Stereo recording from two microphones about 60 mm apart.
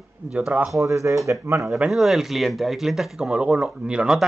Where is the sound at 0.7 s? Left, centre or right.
Right.